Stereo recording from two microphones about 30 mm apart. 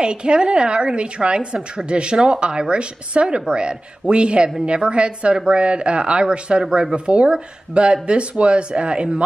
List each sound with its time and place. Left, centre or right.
0.0 s a woman's voice: right